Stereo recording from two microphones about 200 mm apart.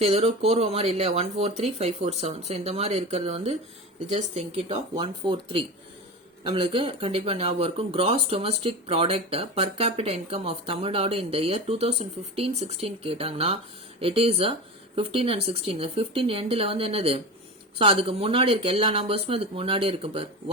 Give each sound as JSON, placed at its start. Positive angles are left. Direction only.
{"t": 0.0, "sound": "speech", "side_deg": -30}